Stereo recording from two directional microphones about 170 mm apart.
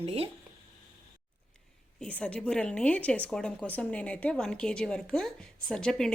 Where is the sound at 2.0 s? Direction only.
10° left (ahead or behind).